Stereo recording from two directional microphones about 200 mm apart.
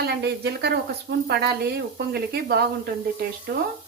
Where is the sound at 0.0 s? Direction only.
55° right (ahead or behind).